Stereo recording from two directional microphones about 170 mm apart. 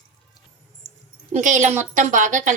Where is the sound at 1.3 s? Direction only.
45° right (ahead or behind).